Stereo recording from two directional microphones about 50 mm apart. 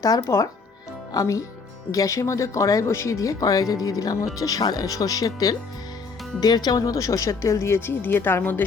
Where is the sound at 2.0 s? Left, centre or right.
Left.